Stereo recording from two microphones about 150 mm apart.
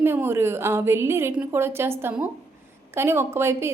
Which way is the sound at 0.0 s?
15° right (ahead or behind).